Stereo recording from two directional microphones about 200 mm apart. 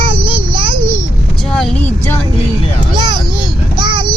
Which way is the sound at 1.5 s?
5° left (ahead or behind).